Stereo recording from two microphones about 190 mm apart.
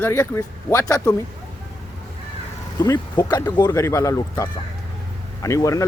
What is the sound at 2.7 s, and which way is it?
Speech, 15° left (ahead or behind).